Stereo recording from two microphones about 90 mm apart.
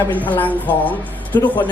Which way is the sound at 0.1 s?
20° left (ahead or behind).